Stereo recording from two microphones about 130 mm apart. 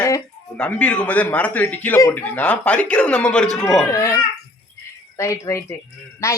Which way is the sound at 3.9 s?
25° left (ahead or behind).